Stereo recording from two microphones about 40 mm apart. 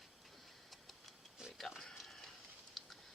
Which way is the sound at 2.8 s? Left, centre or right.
Centre.